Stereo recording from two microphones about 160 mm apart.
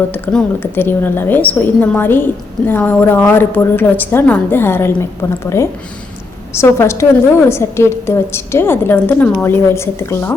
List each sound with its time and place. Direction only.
0.1 s a woman's voice: 10° left (ahead or behind)